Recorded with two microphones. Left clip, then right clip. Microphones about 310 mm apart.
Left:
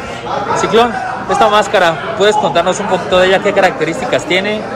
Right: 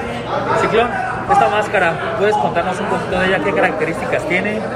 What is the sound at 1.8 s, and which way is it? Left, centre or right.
Speech, left.